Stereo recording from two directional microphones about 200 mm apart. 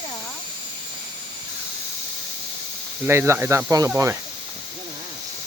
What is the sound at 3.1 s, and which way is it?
Speech, 15° right (ahead or behind).